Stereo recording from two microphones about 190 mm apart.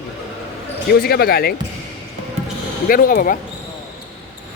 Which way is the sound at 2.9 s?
50° left (ahead or behind).